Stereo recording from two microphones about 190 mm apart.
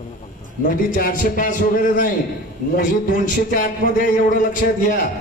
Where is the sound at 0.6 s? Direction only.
45° left (ahead or behind).